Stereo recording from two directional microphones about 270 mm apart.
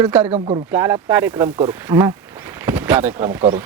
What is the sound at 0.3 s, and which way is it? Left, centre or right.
Speech, right.